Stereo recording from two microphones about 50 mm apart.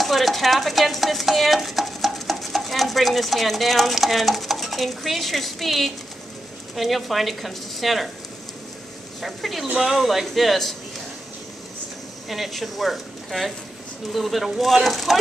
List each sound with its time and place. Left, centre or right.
0.0 s speech: centre
9.2 s speech: centre
12.3 s speech: centre